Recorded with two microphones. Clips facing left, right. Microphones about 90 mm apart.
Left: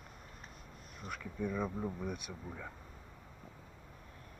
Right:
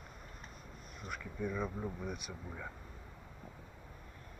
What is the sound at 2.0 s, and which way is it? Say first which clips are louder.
Speech: left 1 dB; 5° right (ahead or behind).